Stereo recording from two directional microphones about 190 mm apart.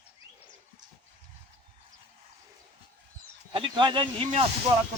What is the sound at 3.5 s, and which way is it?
Speech, 25° right (ahead or behind).